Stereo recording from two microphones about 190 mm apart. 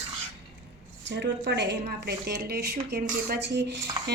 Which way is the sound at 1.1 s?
65° right (ahead or behind).